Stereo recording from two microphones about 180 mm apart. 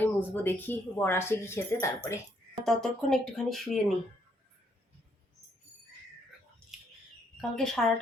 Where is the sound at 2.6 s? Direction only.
Centre (ahead or behind).